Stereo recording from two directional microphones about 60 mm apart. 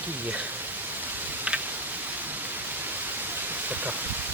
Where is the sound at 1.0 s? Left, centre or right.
Right.